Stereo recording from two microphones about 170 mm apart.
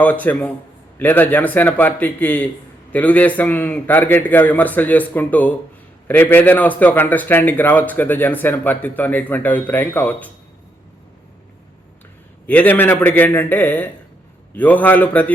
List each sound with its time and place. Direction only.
0.0 s a man's voice: 10° left (ahead or behind)
12.5 s a man's voice: 10° left (ahead or behind)